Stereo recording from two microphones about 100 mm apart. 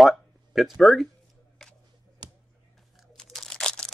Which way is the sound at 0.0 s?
5° right (ahead or behind).